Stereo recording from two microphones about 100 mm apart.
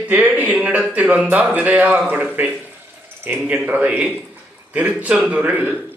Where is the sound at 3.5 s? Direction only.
10° right (ahead or behind).